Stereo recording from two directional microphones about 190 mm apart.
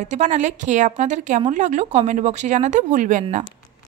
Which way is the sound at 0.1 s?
40° right (ahead or behind).